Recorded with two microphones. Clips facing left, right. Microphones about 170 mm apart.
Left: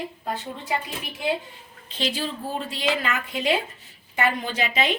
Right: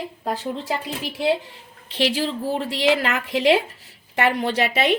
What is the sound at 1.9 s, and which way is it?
A woman's voice, 75° right (ahead or behind).